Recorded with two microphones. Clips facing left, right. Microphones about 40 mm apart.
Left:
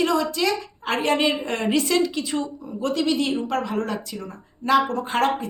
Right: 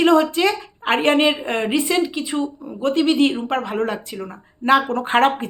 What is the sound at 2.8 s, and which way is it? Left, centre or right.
Speech, right.